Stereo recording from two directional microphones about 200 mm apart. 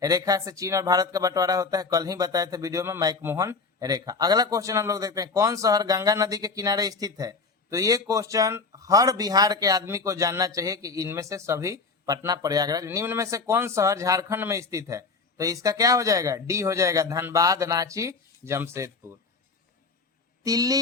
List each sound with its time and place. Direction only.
0.0 s speech: 15° right (ahead or behind)
20.4 s speech: 20° right (ahead or behind)